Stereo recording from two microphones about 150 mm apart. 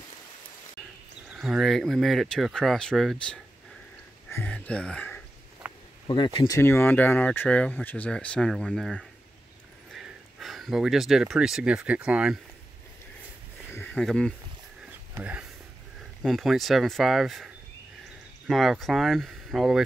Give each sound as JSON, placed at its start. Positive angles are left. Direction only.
{"t": 1.3, "sound": "speech", "side_deg": 0}
{"t": 5.6, "sound": "a sound", "side_deg": -5}
{"t": 6.0, "sound": "speech", "side_deg": 35}
{"t": 6.5, "sound": "speech", "side_deg": 15}
{"t": 13.7, "sound": "a sound", "side_deg": 15}
{"t": 15.1, "sound": "speech", "side_deg": -10}
{"t": 16.2, "sound": "speech", "side_deg": 0}
{"t": 18.5, "sound": "speech", "side_deg": 0}